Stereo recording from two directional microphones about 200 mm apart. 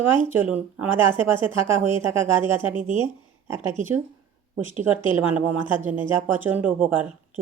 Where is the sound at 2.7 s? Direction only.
40° right (ahead or behind).